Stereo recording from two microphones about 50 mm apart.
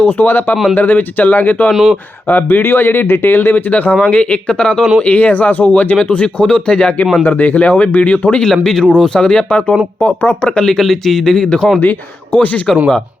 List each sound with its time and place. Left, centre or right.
0.0 s speech: left
1.7 s speech: centre
2.2 s speech: left
3.7 s speech: left
7.3 s speech: left
8.6 s speech: centre
11.8 s speech: left